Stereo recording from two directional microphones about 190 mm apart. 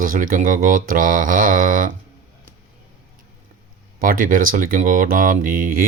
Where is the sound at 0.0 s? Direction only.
45° right (ahead or behind).